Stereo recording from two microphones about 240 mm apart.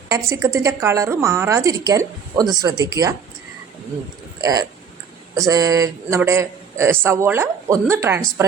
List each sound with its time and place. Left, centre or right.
0.1 s a woman's voice: centre
4.4 s a woman's voice: centre